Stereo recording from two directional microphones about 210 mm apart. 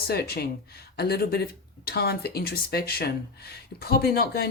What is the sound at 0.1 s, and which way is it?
Speech, 50° left (ahead or behind).